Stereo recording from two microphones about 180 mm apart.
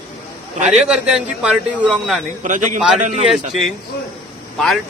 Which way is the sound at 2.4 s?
45° right (ahead or behind).